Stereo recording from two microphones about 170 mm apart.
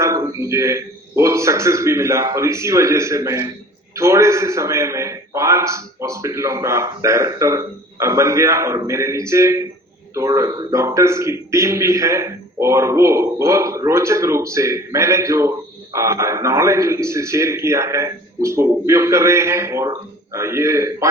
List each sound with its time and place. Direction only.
0.0 s a man's voice: 20° right (ahead or behind)